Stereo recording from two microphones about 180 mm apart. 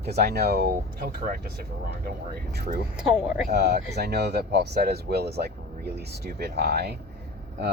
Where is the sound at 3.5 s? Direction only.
60° right (ahead or behind).